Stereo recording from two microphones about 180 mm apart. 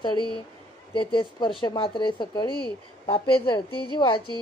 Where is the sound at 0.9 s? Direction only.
25° left (ahead or behind).